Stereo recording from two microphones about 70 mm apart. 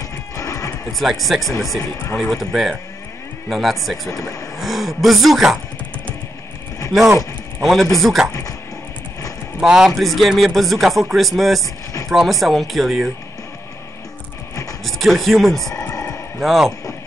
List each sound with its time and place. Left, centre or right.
0.4 s neigh: left
0.9 s a man's voice: centre
6.9 s a man's voice: centre
8.3 s speech: left
9.6 s a man's voice: centre
14.5 s a sound: left
14.9 s speech: centre
15.8 s a sound: left
16.3 s a man's voice: centre